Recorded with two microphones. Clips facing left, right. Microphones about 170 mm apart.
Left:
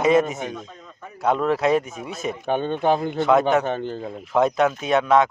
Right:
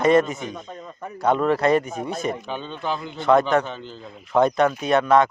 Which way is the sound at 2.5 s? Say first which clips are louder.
Left 8 dB; 55° left (ahead or behind).